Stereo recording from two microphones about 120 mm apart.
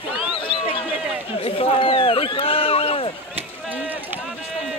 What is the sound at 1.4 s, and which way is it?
Speech, 50° left (ahead or behind).